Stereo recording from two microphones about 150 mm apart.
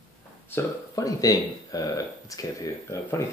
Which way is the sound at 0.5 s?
20° left (ahead or behind).